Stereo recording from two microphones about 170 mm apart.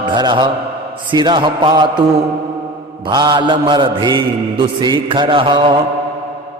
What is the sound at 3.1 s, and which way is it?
Mantra, 25° right (ahead or behind).